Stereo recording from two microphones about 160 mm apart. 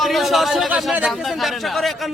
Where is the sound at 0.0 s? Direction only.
Centre (ahead or behind).